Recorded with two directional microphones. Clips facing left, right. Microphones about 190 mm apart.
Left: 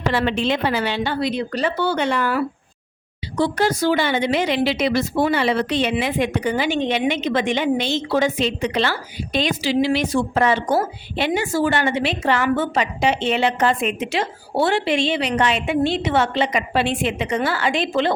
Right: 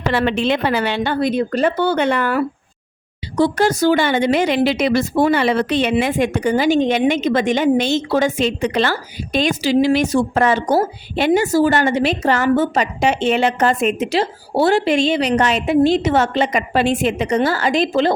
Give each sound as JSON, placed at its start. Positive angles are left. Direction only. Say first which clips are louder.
{"t": 0.1, "sound": "a woman's voice", "louder": "right 3 dB", "side_deg": -60}
{"t": 3.3, "sound": "a woman's voice", "louder": "right 4 dB", "side_deg": -45}